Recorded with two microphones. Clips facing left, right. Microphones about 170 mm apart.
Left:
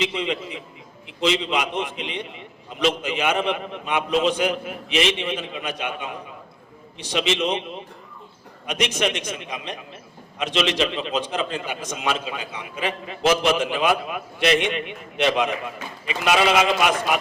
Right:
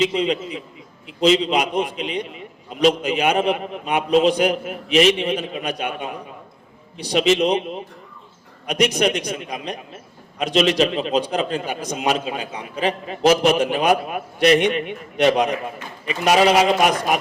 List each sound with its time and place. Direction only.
0.0 s a man's voice: 35° right (ahead or behind)